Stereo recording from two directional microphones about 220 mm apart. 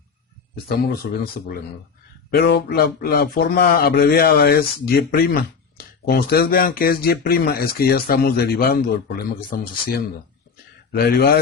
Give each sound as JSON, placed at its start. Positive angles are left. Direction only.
{"t": 2.3, "sound": "speech", "side_deg": 50}